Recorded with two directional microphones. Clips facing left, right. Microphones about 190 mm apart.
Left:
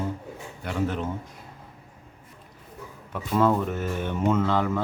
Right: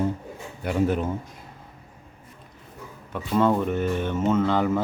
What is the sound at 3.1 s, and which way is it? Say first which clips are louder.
Speech: right 1 dB; centre (ahead or behind).